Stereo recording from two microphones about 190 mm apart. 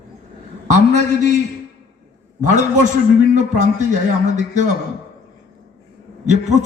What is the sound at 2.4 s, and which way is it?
A man's voice, 40° right (ahead or behind).